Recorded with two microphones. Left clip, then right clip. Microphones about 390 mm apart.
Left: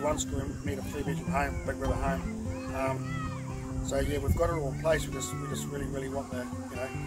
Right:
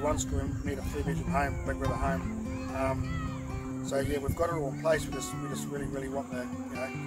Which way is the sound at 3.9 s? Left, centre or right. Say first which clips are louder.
Even; centre.